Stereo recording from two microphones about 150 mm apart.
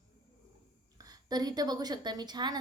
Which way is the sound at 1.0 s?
25° right (ahead or behind).